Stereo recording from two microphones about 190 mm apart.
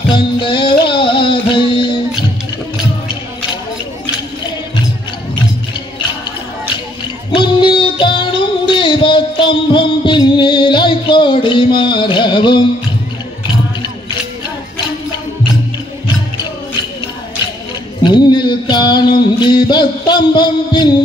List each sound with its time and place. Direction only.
0.1 s music: 25° left (ahead or behind)
7.3 s music: 25° left (ahead or behind)
18.0 s a sound: 25° left (ahead or behind)
19.4 s music: 25° left (ahead or behind)